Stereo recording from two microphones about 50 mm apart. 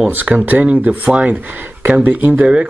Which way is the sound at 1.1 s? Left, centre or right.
Right.